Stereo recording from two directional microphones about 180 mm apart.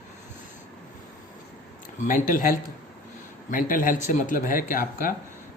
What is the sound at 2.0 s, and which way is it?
Speech, 50° left (ahead or behind).